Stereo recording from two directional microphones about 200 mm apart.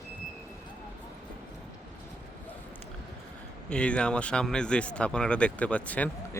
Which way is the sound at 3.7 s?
5° left (ahead or behind).